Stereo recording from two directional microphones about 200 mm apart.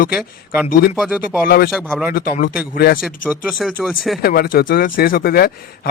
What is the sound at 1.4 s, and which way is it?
Speech, 50° left (ahead or behind).